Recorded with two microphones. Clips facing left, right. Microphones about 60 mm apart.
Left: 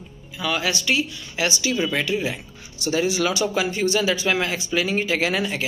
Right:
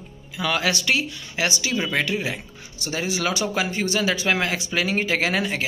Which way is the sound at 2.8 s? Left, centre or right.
Right.